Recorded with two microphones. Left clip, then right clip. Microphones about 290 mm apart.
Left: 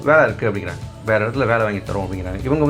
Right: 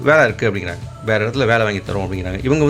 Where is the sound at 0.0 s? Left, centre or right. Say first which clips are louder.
Right 1 dB; right.